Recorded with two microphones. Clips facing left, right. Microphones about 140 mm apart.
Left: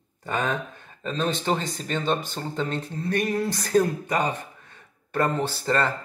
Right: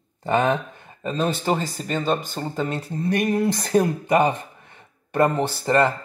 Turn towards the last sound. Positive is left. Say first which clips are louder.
# right 5 dB
turn(degrees=-15)  # may be behind; listen again after turning